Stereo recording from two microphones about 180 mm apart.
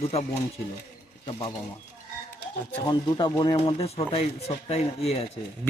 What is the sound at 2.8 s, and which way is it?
Speech, 25° left (ahead or behind).